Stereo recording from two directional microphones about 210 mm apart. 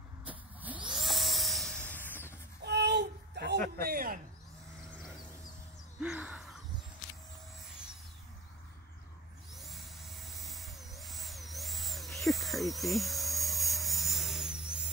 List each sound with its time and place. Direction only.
0.2 s vehicle: 5° right (ahead or behind)
0.8 s a sound: centre (ahead or behind)
2.6 s a sound: 55° right (ahead or behind)
3.7 s a man's voice: 45° right (ahead or behind)
5.9 s gasp: 5° right (ahead or behind)
9.6 s vehicle: centre (ahead or behind)